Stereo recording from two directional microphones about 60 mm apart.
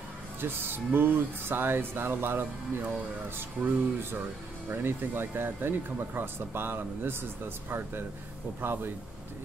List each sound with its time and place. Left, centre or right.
0.4 s speech: right
8.5 s speech: right